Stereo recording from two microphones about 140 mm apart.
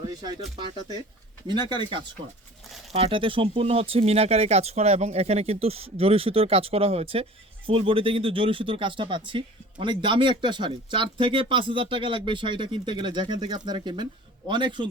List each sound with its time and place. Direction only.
1.5 s speech: 35° right (ahead or behind)